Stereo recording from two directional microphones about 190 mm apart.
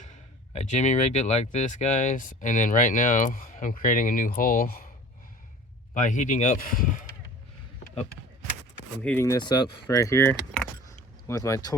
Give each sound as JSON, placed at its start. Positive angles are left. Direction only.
{"t": 0.5, "sound": "speech", "side_deg": 40}
{"t": 5.9, "sound": "speech", "side_deg": 40}
{"t": 9.0, "sound": "speech", "side_deg": 10}